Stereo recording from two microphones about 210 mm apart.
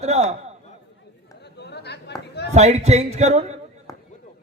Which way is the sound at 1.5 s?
55° left (ahead or behind).